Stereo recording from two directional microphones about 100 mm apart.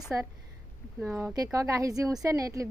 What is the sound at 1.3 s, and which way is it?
A woman's voice, 35° right (ahead or behind).